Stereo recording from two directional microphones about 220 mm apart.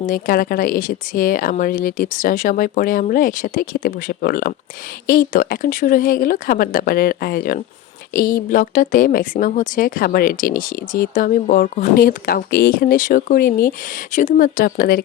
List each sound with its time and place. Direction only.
0.0 s speech: 40° left (ahead or behind)